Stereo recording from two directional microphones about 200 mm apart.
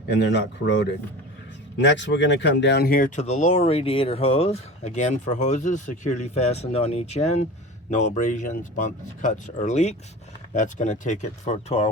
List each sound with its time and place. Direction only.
0.2 s speech: 60° left (ahead or behind); by 11.9 s 35° left (ahead or behind)